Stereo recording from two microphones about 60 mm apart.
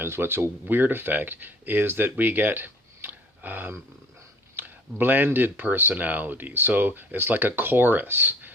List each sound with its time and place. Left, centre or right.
0.0 s speech: right